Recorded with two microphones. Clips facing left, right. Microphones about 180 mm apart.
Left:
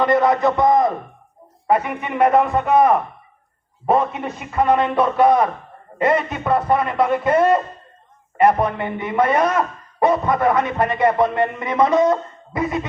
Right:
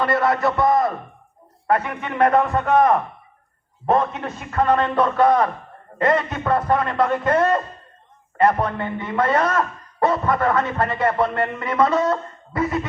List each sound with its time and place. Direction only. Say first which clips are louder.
0.0 s a man's voice: left 3 dB; 20° left (ahead or behind)